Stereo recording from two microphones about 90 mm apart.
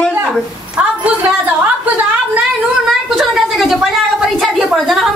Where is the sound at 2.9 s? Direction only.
Centre (ahead or behind).